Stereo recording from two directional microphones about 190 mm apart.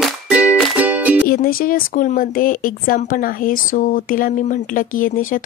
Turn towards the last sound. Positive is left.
turn(degrees=45)  # may be behind; listen again after turning